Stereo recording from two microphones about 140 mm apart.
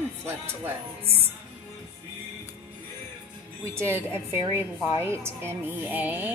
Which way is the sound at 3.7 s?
20° right (ahead or behind).